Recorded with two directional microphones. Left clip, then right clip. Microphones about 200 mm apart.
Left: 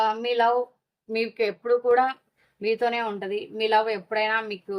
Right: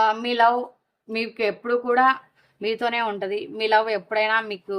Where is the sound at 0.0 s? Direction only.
35° right (ahead or behind).